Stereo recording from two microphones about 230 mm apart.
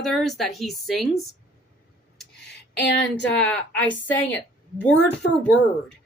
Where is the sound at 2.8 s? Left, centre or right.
Left.